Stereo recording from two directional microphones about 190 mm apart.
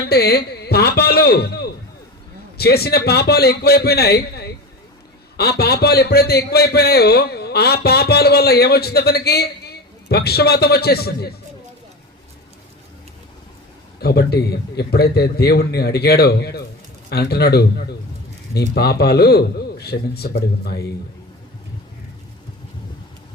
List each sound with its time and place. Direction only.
0.1 s a sound: 55° left (ahead or behind)
2.6 s a man's voice: 55° left (ahead or behind)
14.0 s a man's voice: 60° left (ahead or behind)